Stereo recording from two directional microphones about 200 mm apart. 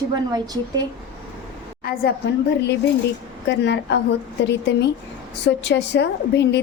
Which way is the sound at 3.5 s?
60° left (ahead or behind).